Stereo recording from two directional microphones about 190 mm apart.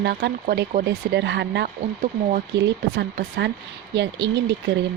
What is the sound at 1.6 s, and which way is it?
Speech, 45° right (ahead or behind).